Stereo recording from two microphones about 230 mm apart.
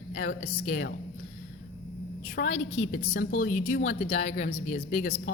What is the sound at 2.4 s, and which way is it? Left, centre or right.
A woman's voice, left.